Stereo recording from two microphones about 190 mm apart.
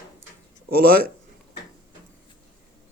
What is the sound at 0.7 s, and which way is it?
Speech, 50° right (ahead or behind).